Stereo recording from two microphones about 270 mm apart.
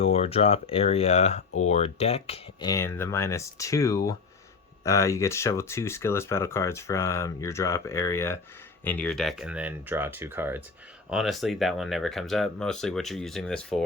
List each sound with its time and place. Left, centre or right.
0.0 s speech: left; by 13.8 s centre